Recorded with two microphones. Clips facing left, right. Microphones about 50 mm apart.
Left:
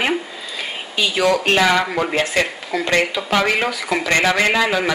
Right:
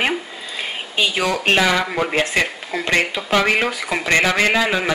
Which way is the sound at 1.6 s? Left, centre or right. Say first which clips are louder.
Left 2 dB; centre.